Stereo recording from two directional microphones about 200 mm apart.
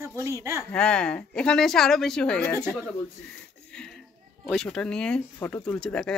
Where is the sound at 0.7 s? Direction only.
5° left (ahead or behind).